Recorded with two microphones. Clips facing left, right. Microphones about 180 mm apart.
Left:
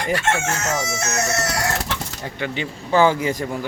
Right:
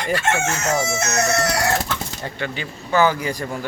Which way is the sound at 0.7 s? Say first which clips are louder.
Right 3 dB; 30° right (ahead or behind).